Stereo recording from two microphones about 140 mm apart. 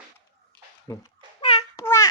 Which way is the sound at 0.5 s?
10° left (ahead or behind).